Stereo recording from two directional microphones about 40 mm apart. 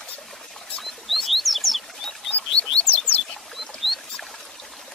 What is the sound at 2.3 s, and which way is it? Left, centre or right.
Bird, left.